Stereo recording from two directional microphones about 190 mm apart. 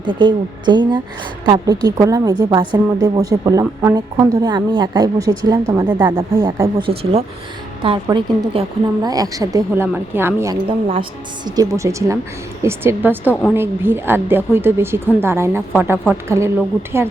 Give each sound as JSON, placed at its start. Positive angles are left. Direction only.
{"t": 0.0, "sound": "a woman's voice", "side_deg": -25}